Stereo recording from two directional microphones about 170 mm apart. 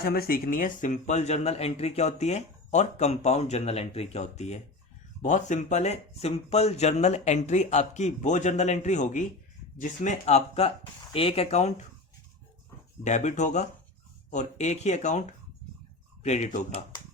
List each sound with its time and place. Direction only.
0.0 s speech: 60° left (ahead or behind); by 11.9 s 40° left (ahead or behind)
13.1 s speech: 45° left (ahead or behind)
16.2 s speech: 45° left (ahead or behind)